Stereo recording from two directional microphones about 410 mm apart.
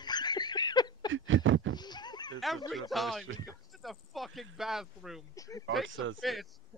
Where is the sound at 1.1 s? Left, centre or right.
Right.